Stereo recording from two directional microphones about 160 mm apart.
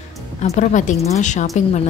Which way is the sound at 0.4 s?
50° left (ahead or behind).